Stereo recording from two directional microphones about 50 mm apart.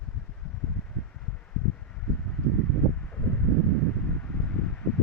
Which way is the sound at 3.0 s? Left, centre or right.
Left.